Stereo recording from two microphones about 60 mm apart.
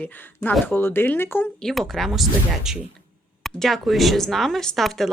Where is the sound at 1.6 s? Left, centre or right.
Centre.